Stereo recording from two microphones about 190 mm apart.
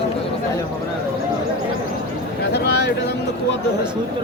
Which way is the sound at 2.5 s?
60° left (ahead or behind).